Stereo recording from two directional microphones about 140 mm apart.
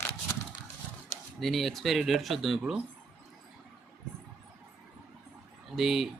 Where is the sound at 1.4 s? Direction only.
Centre (ahead or behind).